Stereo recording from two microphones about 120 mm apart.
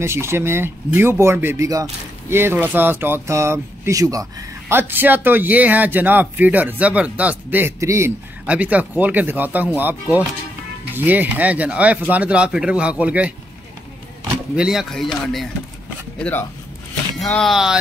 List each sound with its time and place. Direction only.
0.0 s speech: 20° right (ahead or behind)
7.8 s speech: 25° right (ahead or behind)
8.5 s speech: 10° right (ahead or behind)
14.5 s speech: 5° right (ahead or behind)
16.2 s speech: 15° left (ahead or behind)
17.2 s speech: 5° left (ahead or behind)